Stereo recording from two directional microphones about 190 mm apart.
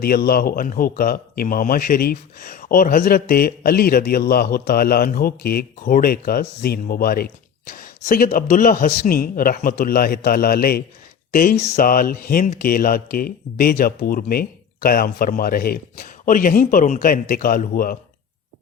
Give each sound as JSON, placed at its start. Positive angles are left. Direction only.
{"t": 0.0, "sound": "a man's voice", "side_deg": 55}
{"t": 11.6, "sound": "speech", "side_deg": 35}
{"t": 11.9, "sound": "a man's voice", "side_deg": 50}